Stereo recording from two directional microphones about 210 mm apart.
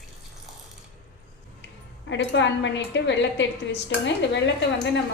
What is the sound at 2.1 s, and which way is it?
A woman's voice, 60° left (ahead or behind).